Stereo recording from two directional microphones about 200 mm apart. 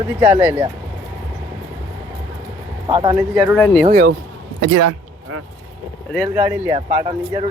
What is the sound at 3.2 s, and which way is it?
Speech, 10° right (ahead or behind).